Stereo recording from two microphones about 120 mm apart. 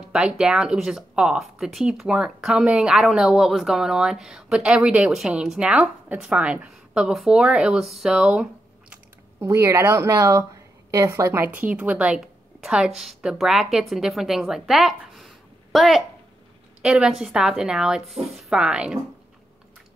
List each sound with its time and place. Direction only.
0.1 s speech: 5° right (ahead or behind)
8.9 s a woman's voice: 20° right (ahead or behind)